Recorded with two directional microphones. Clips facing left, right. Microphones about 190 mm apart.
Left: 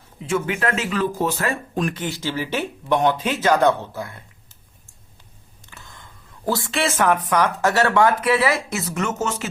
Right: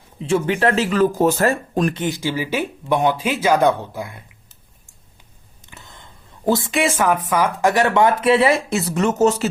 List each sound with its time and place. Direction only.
0.2 s speech: 30° right (ahead or behind)
2.0 s speech: 15° right (ahead or behind)
5.6 s speech: 20° right (ahead or behind); by 9.5 s 40° right (ahead or behind)